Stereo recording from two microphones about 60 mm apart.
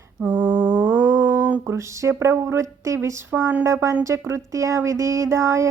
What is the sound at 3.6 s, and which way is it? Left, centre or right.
Speech, right.